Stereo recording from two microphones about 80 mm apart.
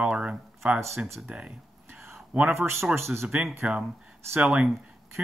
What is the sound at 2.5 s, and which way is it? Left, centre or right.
Speech, right.